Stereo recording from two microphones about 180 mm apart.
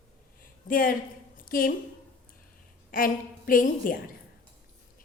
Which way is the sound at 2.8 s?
50° left (ahead or behind).